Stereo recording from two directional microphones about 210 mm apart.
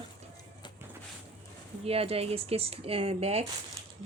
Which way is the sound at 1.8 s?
30° right (ahead or behind).